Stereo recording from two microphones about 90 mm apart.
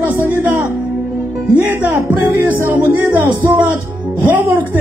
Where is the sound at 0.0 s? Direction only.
25° right (ahead or behind).